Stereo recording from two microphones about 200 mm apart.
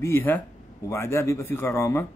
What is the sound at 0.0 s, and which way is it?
A man's voice, 10° left (ahead or behind).